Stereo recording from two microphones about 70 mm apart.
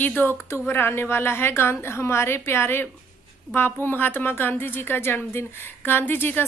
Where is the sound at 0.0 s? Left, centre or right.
Left.